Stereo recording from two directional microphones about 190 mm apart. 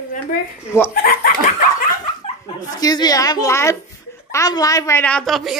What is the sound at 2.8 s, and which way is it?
A woman's voice, 20° left (ahead or behind).